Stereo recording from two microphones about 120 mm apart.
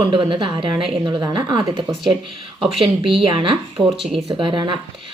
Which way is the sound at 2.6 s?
50° right (ahead or behind).